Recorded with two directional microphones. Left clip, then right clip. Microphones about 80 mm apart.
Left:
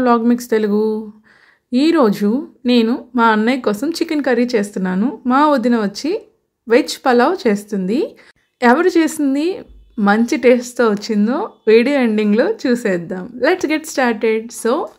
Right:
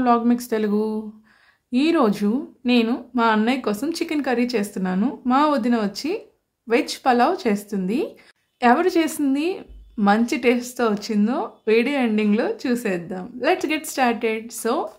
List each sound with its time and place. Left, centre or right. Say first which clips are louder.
0.3 s a woman's voice: left 6 dB; left
4.9 s speech: left 4 dB; left
5.3 s a woman's voice: left 6 dB; left